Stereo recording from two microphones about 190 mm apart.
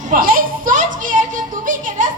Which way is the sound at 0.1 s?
50° right (ahead or behind).